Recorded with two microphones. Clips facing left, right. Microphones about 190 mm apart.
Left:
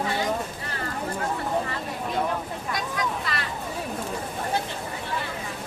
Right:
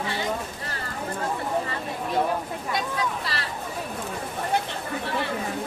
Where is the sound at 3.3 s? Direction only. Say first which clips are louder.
Left 1 dB; 35° right (ahead or behind).